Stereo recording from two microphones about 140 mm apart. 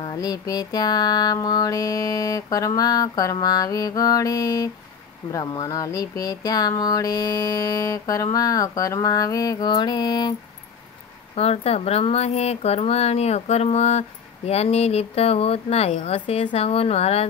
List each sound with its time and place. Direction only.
0.0 s speech: 30° left (ahead or behind)
11.3 s speech: 45° left (ahead or behind)